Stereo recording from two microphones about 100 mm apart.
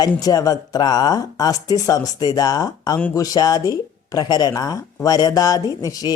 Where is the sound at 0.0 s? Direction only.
40° left (ahead or behind).